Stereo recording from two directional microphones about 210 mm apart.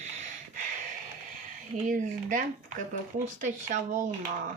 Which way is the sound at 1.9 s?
40° right (ahead or behind).